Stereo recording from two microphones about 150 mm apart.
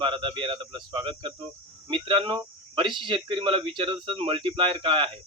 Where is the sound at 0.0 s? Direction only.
35° right (ahead or behind).